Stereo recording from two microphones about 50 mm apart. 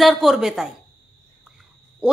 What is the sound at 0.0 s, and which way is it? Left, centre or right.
Speech, centre.